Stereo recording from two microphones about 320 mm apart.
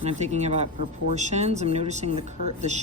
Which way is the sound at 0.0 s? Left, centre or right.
Right.